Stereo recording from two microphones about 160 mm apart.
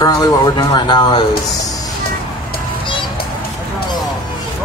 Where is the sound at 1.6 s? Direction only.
20° left (ahead or behind).